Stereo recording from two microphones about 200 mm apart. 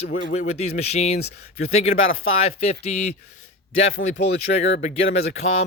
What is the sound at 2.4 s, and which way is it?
Speech, 30° left (ahead or behind).